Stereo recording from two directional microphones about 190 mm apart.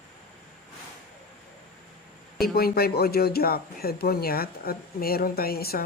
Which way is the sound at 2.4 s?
55° left (ahead or behind).